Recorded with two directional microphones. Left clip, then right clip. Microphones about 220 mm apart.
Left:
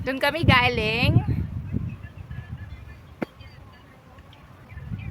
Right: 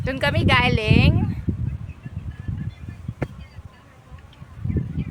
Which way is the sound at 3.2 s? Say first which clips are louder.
Right 1 dB; 15° right (ahead or behind).